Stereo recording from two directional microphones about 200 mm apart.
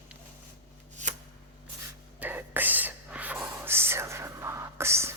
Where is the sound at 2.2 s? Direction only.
10° right (ahead or behind).